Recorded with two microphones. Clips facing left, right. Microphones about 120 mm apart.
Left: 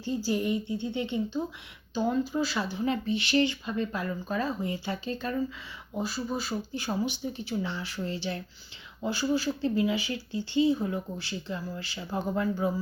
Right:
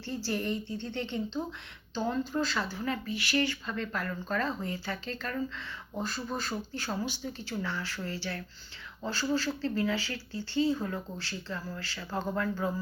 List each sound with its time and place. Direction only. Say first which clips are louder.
0.0 s speech: left 5 dB; 15° left (ahead or behind)